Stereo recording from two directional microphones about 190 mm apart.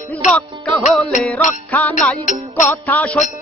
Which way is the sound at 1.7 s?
10° left (ahead or behind).